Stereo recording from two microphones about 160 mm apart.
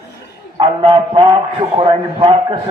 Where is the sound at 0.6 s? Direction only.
30° right (ahead or behind).